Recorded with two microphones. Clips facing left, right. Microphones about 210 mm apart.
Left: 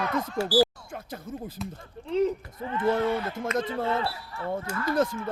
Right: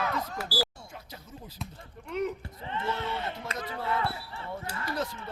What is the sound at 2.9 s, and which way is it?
Speech, 50° left (ahead or behind).